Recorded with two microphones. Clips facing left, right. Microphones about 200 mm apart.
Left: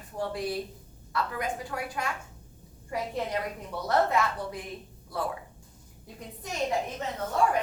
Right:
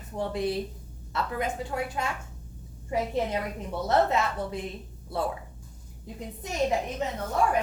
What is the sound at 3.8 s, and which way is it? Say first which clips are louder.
Speech: right 1 dB; 25° right (ahead or behind).